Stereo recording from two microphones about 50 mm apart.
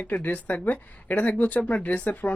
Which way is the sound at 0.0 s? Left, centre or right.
Left.